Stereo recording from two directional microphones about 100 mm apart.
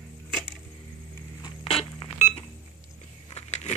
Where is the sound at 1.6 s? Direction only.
65° left (ahead or behind).